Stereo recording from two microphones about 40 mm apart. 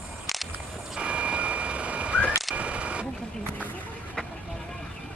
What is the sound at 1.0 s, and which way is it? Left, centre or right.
Reversing beeps, right.